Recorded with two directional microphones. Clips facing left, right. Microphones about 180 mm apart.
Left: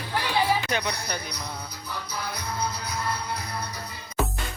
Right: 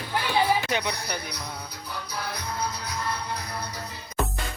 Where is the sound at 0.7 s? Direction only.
15° right (ahead or behind).